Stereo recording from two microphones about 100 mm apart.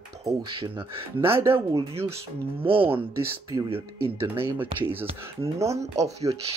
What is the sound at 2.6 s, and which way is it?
Speech, 65° right (ahead or behind).